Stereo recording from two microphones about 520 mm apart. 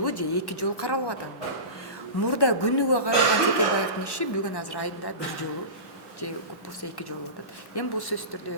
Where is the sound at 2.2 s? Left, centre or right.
Left.